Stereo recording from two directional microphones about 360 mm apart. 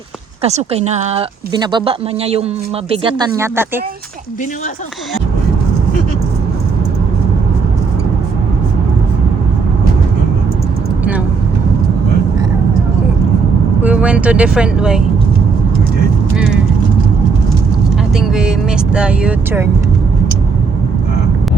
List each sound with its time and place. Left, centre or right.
0.4 s speech: centre
13.8 s speech: centre
18.2 s vehicle: centre
18.9 s speech: centre